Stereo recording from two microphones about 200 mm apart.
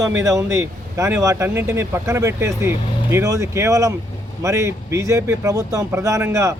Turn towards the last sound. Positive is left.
turn(degrees=-15)  # may be behind; listen again after turning